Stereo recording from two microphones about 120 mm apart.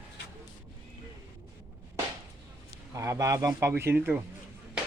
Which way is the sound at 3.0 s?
25° right (ahead or behind).